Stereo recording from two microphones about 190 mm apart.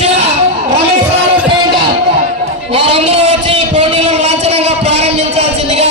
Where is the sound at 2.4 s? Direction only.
35° right (ahead or behind).